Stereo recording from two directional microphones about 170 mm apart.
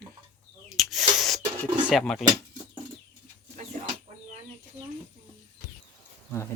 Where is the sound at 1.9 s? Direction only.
Centre (ahead or behind).